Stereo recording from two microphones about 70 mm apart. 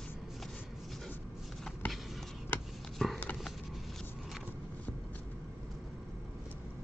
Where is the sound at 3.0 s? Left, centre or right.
Centre.